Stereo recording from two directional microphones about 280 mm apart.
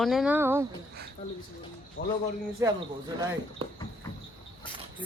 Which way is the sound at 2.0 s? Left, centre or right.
Left.